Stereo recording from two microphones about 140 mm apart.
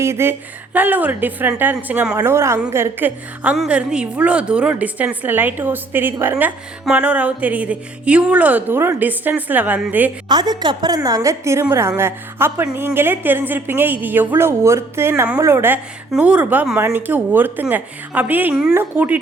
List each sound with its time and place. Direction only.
0.0 s music: 20° right (ahead or behind)
2.1 s a woman's voice: 20° right (ahead or behind)
2.7 s music: 15° right (ahead or behind)
10.2 s a woman's voice: 30° right (ahead or behind)
11.6 s music: 15° right (ahead or behind)